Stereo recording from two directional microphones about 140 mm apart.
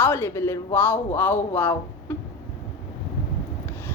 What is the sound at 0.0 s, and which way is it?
A woman's voice, 15° left (ahead or behind).